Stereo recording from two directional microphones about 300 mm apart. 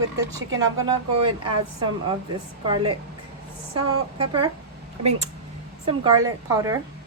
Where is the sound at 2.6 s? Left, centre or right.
Centre.